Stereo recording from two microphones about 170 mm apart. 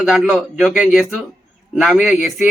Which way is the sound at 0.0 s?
5° right (ahead or behind).